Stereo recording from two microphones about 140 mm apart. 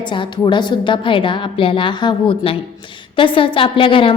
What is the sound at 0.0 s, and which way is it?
A woman's voice, 35° left (ahead or behind).